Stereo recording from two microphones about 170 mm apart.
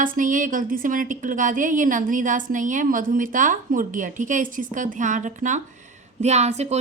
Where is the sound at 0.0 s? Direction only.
50° right (ahead or behind).